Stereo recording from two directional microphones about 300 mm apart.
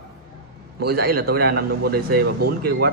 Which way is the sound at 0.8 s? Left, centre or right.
Right.